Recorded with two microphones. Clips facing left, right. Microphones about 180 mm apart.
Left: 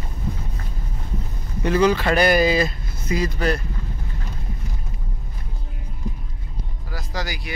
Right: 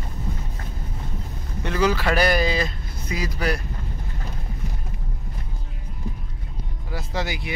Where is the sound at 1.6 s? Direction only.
Centre (ahead or behind).